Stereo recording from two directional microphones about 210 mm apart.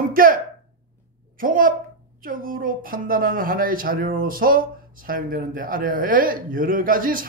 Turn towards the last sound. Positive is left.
turn(degrees=-40)  # may be behind; listen again after turning